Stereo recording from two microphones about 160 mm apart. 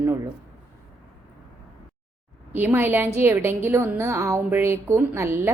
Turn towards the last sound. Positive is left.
turn(degrees=-15)  # may be behind; listen again after turning